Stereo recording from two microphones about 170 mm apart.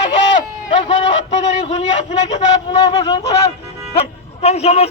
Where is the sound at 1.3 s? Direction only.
40° left (ahead or behind).